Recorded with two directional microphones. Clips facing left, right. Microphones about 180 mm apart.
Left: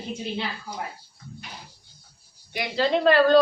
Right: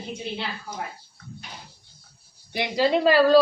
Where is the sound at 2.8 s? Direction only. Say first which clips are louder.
Even; 5° right (ahead or behind).